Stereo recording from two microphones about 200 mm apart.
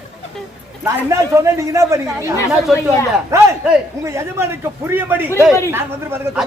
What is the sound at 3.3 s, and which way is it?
Speech, 15° right (ahead or behind).